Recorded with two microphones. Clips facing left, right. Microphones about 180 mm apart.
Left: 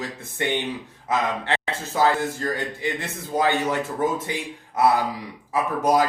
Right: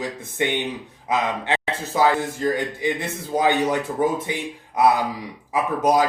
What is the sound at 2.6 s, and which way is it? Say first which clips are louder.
Speech: right 3 dB; 15° right (ahead or behind).